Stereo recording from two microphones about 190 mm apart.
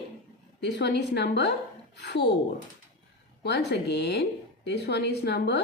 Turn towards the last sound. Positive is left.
turn(degrees=60)  # may be behind; listen again after turning